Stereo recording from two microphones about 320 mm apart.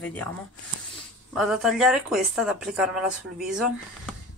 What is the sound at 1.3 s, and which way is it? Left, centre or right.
Speech, centre.